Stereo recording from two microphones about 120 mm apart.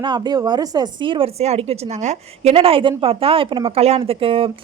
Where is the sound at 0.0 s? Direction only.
35° right (ahead or behind).